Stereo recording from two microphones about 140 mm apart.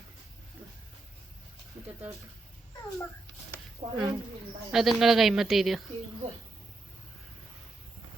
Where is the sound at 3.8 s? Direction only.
45° right (ahead or behind).